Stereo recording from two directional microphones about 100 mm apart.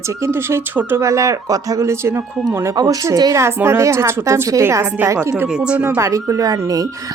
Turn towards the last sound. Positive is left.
turn(degrees=-35)  # may be behind; listen again after turning